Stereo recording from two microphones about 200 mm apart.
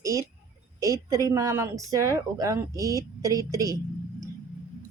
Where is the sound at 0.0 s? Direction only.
15° right (ahead or behind).